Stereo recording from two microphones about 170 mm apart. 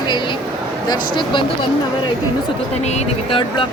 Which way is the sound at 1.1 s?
30° left (ahead or behind).